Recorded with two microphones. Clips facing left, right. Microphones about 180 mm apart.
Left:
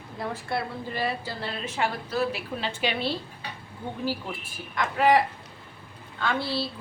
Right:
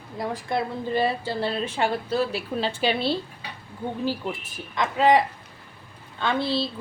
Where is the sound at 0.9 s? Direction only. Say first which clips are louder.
Right 7 dB; 30° right (ahead or behind).